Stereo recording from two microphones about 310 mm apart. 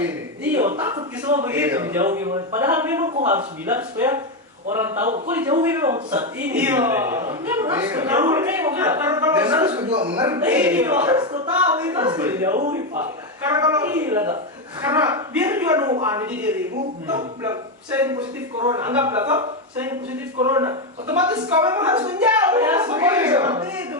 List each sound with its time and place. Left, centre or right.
0.0 s a man's voice: centre
3.2 s a man's voice: right
3.7 s a man's voice: centre